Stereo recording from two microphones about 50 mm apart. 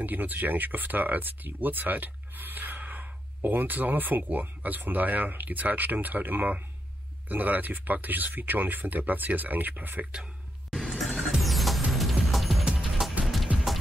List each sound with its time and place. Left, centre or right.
0.0 s speech: right
10.7 s music: centre